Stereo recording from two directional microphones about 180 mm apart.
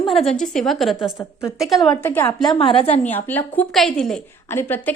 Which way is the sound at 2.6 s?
30° left (ahead or behind).